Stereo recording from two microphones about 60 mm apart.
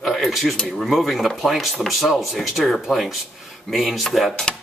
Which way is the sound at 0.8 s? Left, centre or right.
Centre.